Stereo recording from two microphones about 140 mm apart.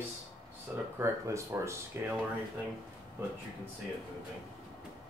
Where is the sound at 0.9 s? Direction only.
20° right (ahead or behind).